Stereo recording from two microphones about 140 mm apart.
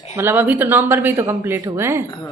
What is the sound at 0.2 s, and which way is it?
A woman's voice, 15° right (ahead or behind).